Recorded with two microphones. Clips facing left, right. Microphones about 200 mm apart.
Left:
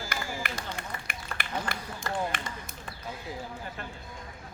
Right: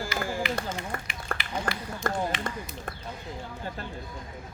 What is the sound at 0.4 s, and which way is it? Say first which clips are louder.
Run: right 7 dB; 50° left (ahead or behind).